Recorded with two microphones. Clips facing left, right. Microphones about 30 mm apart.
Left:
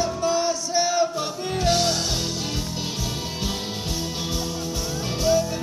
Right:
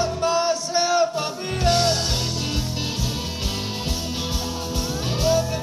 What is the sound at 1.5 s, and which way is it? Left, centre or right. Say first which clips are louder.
Music: right 2 dB; right.